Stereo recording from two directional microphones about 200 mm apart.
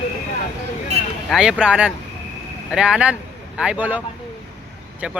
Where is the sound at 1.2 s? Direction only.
Centre (ahead or behind).